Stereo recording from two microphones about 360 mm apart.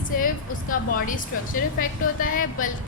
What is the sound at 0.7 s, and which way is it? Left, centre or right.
Speech, left.